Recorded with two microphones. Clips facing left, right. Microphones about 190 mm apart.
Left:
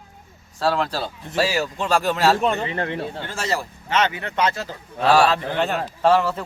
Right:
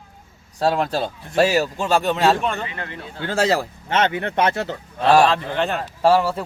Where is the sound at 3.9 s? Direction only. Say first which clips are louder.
Right 2 dB; 55° right (ahead or behind).